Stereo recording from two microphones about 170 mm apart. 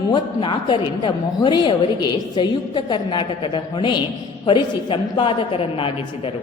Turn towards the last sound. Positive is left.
turn(degrees=35)  # may be behind; listen again after turning